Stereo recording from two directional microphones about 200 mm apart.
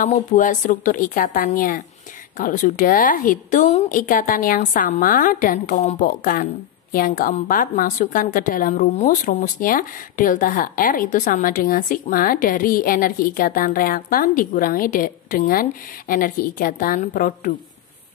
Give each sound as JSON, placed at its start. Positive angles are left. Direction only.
{"t": 0.0, "sound": "a woman's voice", "side_deg": 40}